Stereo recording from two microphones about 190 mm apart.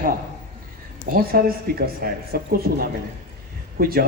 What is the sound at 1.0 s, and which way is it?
Speech, 50° right (ahead or behind).